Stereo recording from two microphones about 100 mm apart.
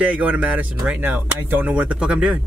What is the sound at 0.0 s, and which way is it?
Speech, 10° right (ahead or behind).